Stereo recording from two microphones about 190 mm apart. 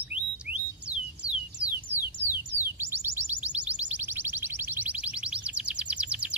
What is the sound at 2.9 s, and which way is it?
Music, 10° right (ahead or behind).